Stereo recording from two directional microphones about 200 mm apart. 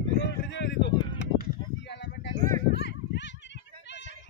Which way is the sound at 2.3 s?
45° right (ahead or behind).